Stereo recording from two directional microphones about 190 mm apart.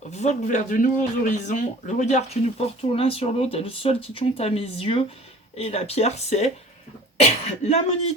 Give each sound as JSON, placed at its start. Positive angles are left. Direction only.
{"t": 0.1, "sound": "speech", "side_deg": 35}